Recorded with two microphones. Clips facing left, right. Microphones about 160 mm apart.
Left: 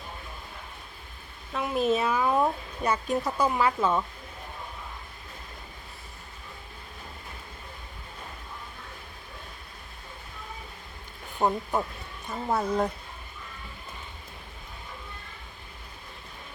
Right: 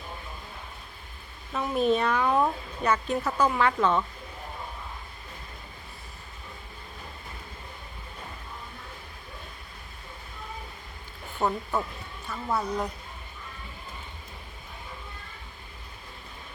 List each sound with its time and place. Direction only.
1.5 s a woman's voice: centre (ahead or behind)
11.3 s speech: 20° left (ahead or behind)
12.3 s speech: 45° left (ahead or behind)